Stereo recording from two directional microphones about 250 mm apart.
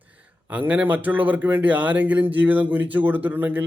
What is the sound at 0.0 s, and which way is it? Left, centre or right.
Speech, centre.